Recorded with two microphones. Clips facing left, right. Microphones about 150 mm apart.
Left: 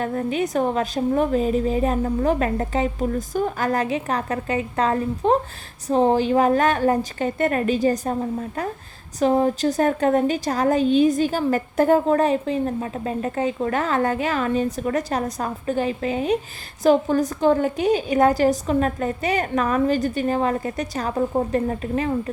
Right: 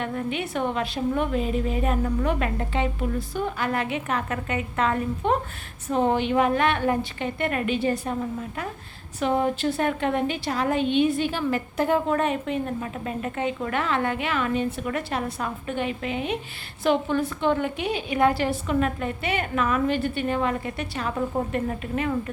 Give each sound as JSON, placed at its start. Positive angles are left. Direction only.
{"t": 0.0, "sound": "a woman's voice", "side_deg": 40}